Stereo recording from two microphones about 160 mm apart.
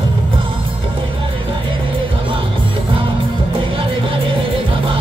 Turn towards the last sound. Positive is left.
turn(degrees=-35)  # may be behind; listen again after turning